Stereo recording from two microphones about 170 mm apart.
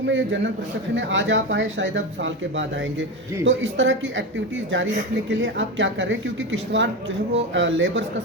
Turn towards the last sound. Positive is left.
turn(degrees=-90)